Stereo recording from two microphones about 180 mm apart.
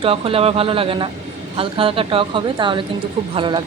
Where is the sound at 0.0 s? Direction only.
30° right (ahead or behind).